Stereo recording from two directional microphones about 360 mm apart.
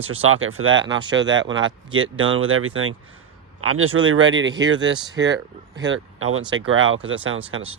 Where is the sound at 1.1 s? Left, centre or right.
Right.